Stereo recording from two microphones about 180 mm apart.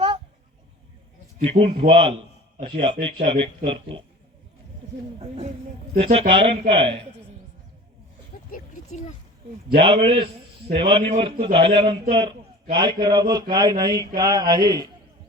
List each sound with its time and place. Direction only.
1.4 s speech: 35° right (ahead or behind)
6.0 s speech: 35° right (ahead or behind)
9.7 s a man's voice: 30° right (ahead or behind)